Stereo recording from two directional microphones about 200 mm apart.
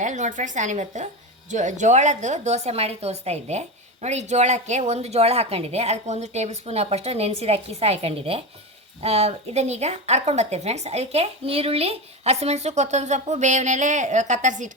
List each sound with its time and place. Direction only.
0.0 s a woman's voice: 40° right (ahead or behind)